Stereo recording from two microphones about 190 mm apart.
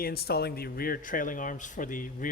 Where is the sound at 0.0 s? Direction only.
55° left (ahead or behind).